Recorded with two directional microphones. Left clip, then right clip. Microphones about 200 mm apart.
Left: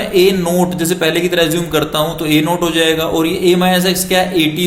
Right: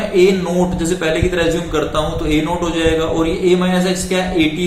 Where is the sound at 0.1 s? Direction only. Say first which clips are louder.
Left 2 dB; 50° left (ahead or behind).